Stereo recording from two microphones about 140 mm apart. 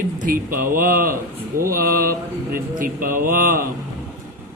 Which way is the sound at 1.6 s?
90° right.